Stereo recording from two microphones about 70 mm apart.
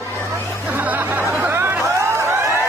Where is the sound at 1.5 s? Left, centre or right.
Right.